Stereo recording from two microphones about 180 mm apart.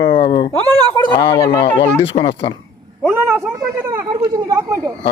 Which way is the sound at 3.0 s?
10° right (ahead or behind).